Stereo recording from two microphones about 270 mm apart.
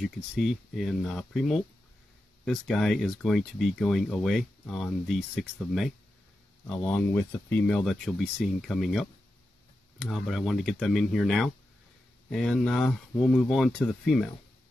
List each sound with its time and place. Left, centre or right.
0.0 s speech: centre